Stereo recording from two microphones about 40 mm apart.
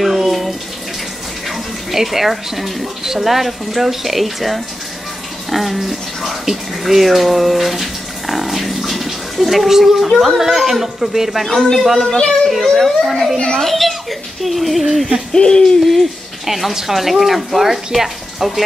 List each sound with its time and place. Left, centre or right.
0.0 s bathtub: centre
1.5 s speech: centre
12.1 s a child's voice: centre
12.4 s speech: centre
15.3 s speech: centre
16.4 s speech: centre